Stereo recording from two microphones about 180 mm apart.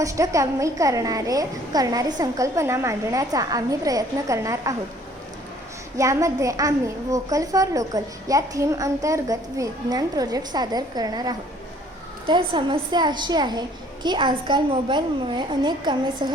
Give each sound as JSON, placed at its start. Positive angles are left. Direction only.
{"t": 0.0, "sound": "a woman's voice", "side_deg": -15}
{"t": 6.0, "sound": "a woman's voice", "side_deg": -20}